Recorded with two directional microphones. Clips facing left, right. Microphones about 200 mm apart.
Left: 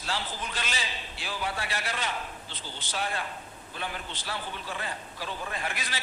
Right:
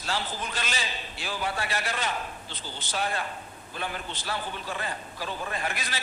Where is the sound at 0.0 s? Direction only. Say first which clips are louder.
Right 2 dB; 45° right (ahead or behind).